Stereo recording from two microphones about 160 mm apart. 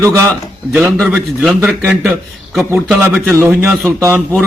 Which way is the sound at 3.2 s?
10° right (ahead or behind).